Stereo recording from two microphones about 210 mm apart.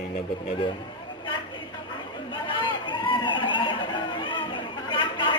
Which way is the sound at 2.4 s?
25° left (ahead or behind).